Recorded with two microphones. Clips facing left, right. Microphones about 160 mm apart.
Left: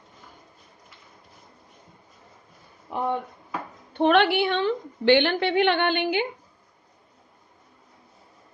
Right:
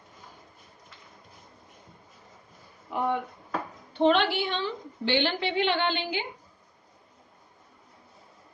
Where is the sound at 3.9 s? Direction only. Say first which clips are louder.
Left 3 dB; 60° left (ahead or behind).